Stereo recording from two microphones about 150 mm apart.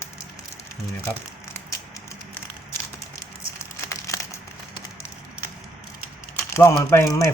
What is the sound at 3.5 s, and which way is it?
Crumpling, 20° left (ahead or behind).